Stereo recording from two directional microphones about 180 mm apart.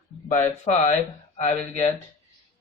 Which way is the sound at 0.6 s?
40° left (ahead or behind).